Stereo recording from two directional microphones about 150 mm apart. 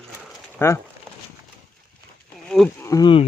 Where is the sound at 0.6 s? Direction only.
15° left (ahead or behind).